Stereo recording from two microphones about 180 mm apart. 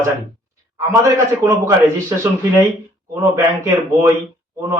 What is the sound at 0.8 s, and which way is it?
A man's voice, 15° right (ahead or behind).